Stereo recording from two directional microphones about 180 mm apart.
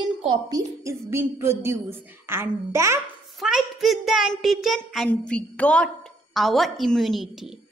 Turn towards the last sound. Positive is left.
turn(degrees=0)  # may be behind; listen again after turning